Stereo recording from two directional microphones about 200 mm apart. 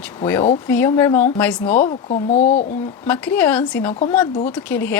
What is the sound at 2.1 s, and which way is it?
Speech, 35° left (ahead or behind).